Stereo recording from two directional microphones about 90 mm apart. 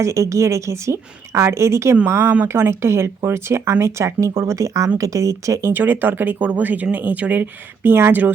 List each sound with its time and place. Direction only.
0.0 s a woman's voice: 35° right (ahead or behind)
5.7 s speech: 20° right (ahead or behind)